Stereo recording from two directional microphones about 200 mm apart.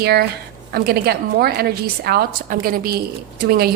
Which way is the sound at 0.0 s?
50° right (ahead or behind).